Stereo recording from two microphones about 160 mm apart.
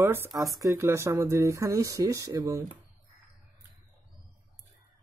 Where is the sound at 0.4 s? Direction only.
20° right (ahead or behind).